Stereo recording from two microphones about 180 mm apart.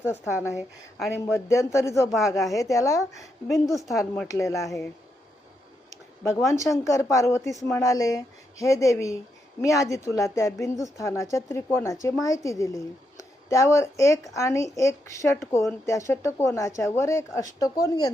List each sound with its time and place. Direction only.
1.1 s speech: 15° left (ahead or behind)
5.9 s a sound: 15° left (ahead or behind)
6.5 s a woman's voice: 15° left (ahead or behind)